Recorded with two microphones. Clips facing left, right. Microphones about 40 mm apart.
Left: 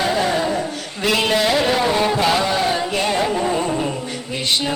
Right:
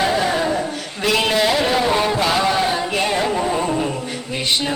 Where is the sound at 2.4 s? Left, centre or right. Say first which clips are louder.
Right 1 dB; centre.